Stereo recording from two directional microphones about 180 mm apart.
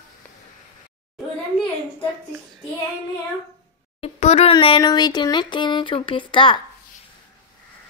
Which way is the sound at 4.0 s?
35° left (ahead or behind).